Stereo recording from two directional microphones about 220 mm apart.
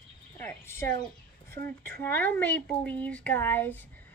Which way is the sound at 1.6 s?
20° left (ahead or behind).